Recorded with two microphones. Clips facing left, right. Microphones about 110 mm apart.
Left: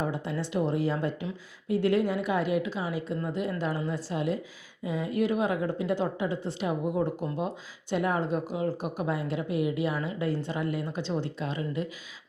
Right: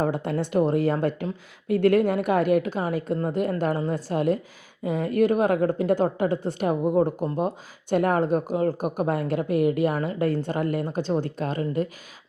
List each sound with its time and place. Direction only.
0.0 s a woman's voice: 55° right (ahead or behind)